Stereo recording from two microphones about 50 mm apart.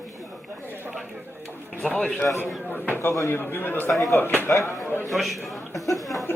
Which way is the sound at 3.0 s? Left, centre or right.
Left.